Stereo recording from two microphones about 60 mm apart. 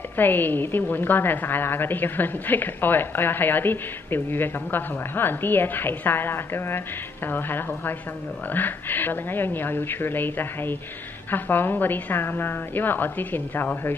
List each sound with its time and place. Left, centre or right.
0.2 s a woman's voice: left